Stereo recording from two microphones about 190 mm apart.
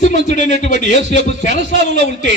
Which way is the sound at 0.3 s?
40° left (ahead or behind).